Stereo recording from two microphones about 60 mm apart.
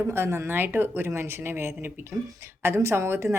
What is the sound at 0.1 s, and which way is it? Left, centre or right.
A woman's voice, right.